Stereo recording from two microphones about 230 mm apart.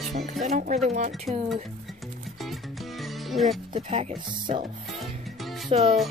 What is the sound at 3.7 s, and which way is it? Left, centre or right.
Speech, right.